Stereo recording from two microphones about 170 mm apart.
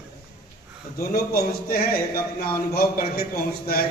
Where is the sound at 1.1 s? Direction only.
65° left (ahead or behind).